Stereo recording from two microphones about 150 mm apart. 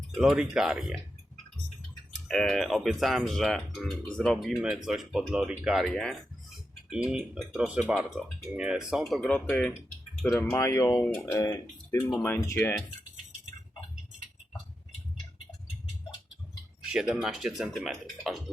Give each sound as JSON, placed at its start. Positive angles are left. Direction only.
{"t": 0.1, "sound": "speech", "side_deg": 0}
{"t": 2.1, "sound": "speech", "side_deg": 5}
{"t": 10.6, "sound": "speech", "side_deg": 20}
{"t": 10.9, "sound": "speech", "side_deg": 5}
{"t": 11.2, "sound": "speech", "side_deg": 20}
{"t": 16.9, "sound": "speech", "side_deg": -5}